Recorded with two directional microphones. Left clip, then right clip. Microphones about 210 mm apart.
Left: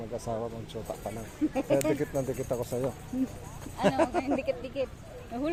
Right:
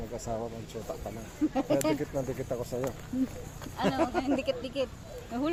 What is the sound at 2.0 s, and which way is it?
Speech, 25° left (ahead or behind).